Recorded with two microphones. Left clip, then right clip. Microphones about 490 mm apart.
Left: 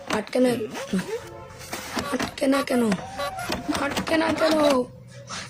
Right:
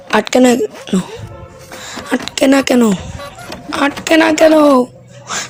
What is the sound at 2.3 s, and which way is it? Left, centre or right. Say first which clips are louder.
Speech: right 13 dB; right.